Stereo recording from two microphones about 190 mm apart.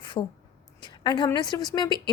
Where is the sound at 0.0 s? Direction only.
25° left (ahead or behind).